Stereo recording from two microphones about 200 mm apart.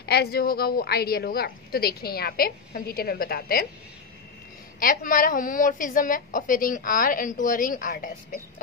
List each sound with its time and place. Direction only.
0.0 s a woman's voice: 55° left (ahead or behind)
4.7 s a woman's voice: 45° left (ahead or behind)